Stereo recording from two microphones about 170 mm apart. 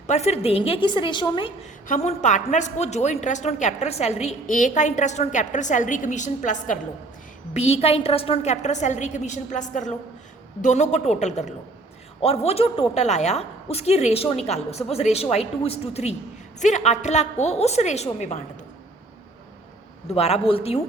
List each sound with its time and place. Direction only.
0.1 s a woman's voice: 40° left (ahead or behind)
1.9 s a woman's voice: 45° left (ahead or behind)
20.1 s a woman's voice: 40° left (ahead or behind)